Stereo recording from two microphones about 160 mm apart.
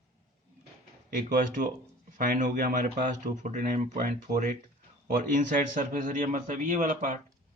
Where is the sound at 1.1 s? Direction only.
60° right (ahead or behind).